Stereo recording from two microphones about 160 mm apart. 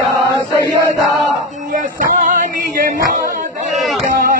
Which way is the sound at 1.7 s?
55° right (ahead or behind).